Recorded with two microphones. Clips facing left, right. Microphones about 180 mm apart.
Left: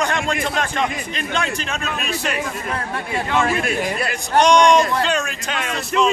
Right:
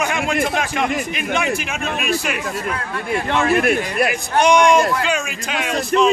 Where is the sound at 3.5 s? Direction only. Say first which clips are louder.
Right 4 dB; 55° right (ahead or behind).